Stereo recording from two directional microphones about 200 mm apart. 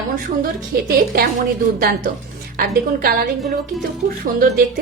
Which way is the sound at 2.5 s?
45° right (ahead or behind).